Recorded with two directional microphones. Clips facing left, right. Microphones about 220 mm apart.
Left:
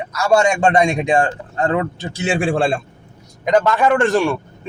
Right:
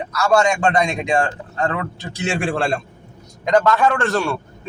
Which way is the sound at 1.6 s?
30° left (ahead or behind).